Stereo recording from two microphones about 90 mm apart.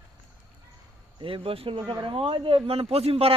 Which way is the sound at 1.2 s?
90° right.